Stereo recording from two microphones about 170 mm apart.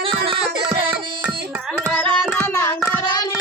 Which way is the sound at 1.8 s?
10° left (ahead or behind).